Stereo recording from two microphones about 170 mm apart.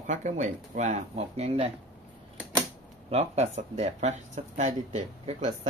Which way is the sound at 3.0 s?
40° right (ahead or behind).